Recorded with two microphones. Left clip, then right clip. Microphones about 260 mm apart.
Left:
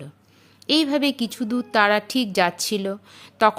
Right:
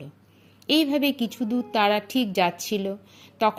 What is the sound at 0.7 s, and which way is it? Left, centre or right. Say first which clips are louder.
Speech: left 2 dB; left.